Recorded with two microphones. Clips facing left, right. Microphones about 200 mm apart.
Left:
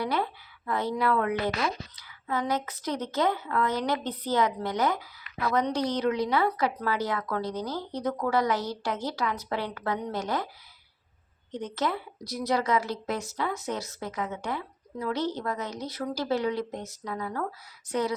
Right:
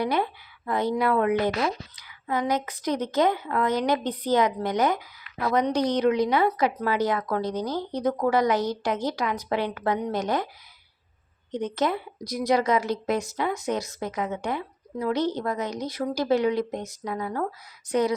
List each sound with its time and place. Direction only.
0.0 s a woman's voice: 15° right (ahead or behind)
11.5 s a woman's voice: 15° right (ahead or behind)